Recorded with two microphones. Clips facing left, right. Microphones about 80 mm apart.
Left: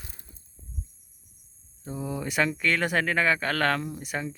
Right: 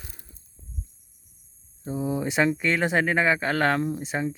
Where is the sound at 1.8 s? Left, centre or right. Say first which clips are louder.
Right 5 dB; centre.